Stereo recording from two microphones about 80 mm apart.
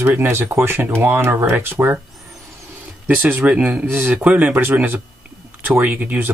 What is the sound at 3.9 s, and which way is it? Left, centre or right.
Speech, right.